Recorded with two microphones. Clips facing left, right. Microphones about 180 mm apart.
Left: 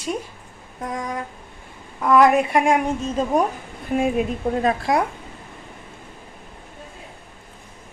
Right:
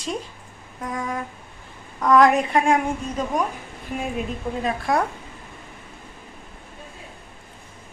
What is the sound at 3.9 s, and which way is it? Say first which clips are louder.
Speech: left 8 dB; 45° left (ahead or behind).